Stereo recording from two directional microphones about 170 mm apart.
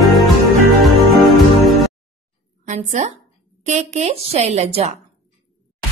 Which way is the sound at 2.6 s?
45° right (ahead or behind).